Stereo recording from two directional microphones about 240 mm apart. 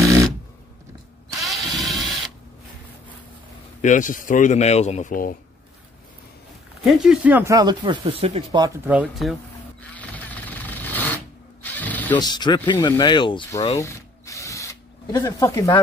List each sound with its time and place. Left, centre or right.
1.4 s drill: centre
3.8 s speech: left
6.8 s speech: centre; by 8.7 s right
8.8 s a sound: centre
11.6 s ratchet: centre
12.3 s speech: centre